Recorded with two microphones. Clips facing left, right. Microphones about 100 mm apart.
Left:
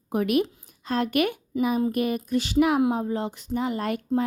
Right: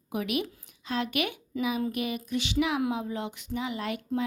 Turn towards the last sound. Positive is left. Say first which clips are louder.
# left 6 dB
turn(degrees=45)  # may be behind; listen again after turning